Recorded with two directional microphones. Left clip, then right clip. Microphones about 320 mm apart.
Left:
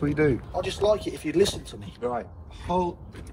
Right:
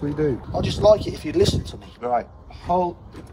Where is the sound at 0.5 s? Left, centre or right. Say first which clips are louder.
Right 10 dB; centre.